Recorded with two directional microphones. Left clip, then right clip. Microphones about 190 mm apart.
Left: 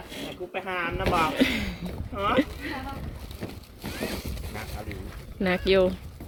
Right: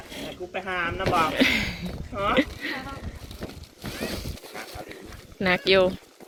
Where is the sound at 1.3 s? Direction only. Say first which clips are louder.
Right 3 dB; 15° left (ahead or behind).